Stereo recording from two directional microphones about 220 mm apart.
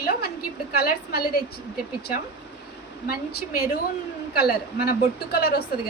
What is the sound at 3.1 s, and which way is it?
A woman's voice, 45° left (ahead or behind).